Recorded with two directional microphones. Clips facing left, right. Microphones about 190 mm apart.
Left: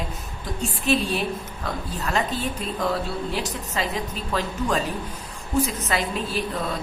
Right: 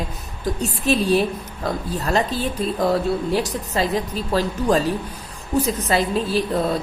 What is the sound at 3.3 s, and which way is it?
A woman's voice, 40° right (ahead or behind).